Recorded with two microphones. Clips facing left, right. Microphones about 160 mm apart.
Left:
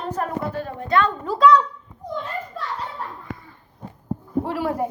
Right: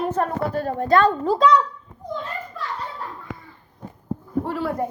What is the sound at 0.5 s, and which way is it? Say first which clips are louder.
Speech: right 4 dB; 40° right (ahead or behind).